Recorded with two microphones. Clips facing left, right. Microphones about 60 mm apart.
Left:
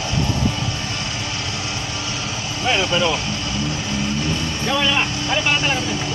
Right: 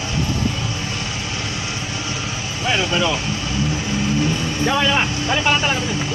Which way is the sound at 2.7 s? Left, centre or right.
Centre.